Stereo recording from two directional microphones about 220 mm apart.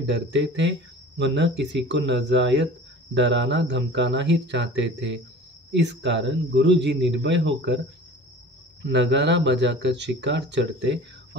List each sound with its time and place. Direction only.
0.0 s speech: 55° right (ahead or behind)
8.8 s speech: 55° right (ahead or behind)